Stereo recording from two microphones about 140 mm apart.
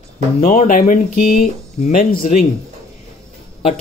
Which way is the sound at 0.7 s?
70° left (ahead or behind).